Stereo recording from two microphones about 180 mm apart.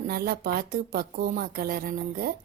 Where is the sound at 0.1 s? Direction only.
55° right (ahead or behind).